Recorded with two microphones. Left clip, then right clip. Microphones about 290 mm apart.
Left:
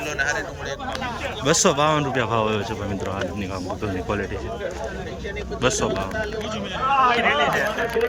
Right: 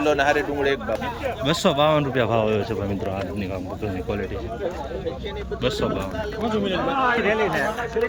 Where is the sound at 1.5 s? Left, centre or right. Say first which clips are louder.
Left 1 dB; centre.